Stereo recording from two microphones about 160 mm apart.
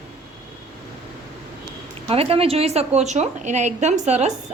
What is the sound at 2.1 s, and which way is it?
A woman's voice, 35° right (ahead or behind).